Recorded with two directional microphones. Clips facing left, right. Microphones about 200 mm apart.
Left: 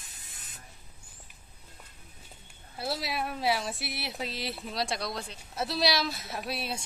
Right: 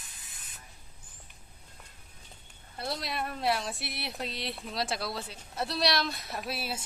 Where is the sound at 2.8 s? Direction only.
5° left (ahead or behind).